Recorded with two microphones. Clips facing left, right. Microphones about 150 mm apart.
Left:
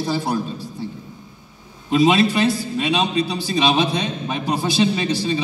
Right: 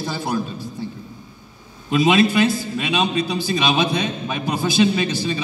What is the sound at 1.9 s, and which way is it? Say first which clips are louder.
A man's voice: even; 35° left (ahead or behind).